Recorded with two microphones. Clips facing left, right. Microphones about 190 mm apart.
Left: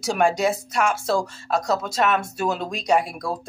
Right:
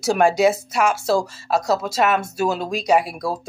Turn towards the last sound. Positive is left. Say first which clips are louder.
# right 3 dB
turn(degrees=-5)  # may be behind; listen again after turning